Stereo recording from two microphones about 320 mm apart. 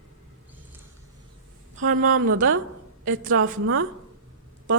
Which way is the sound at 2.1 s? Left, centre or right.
Right.